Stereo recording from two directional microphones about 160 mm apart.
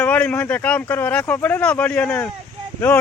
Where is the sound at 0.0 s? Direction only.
10° left (ahead or behind).